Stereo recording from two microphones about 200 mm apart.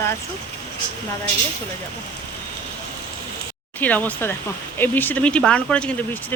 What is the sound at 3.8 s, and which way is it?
Speech, 10° left (ahead or behind).